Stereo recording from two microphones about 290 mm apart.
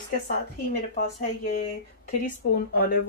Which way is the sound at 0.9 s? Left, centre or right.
Left.